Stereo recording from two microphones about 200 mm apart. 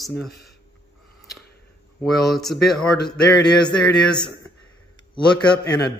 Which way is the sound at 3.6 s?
20° left (ahead or behind).